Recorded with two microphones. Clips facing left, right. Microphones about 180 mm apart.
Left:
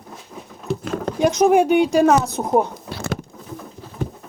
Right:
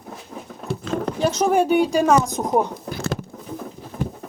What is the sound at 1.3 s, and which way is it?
Speech, 10° left (ahead or behind).